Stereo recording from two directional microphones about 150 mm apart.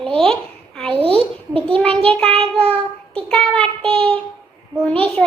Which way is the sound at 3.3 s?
5° left (ahead or behind).